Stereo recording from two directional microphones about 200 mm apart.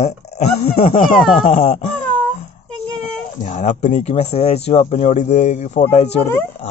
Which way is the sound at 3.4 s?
35° left (ahead or behind).